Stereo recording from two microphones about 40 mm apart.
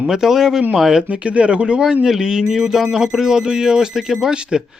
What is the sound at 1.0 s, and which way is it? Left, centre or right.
Speech, right.